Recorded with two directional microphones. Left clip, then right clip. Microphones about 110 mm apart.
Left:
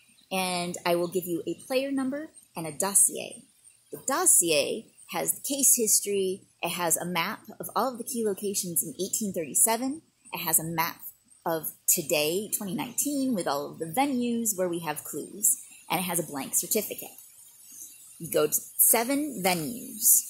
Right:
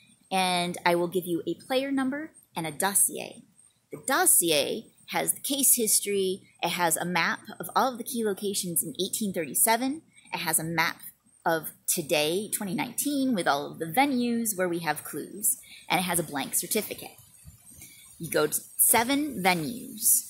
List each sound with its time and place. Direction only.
0.3 s a woman's voice: 10° right (ahead or behind)
4.0 s a woman's voice: 15° right (ahead or behind)
10.3 s a woman's voice: centre (ahead or behind)
18.9 s a woman's voice: 5° right (ahead or behind)